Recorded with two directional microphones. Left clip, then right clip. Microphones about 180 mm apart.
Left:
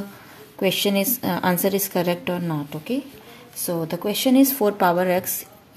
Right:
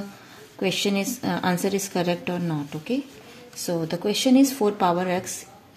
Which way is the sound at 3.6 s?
15° left (ahead or behind).